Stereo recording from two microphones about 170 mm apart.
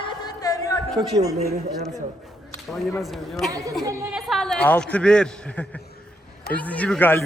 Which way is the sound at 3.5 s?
20° right (ahead or behind).